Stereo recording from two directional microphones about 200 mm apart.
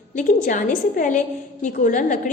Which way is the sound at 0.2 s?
40° left (ahead or behind).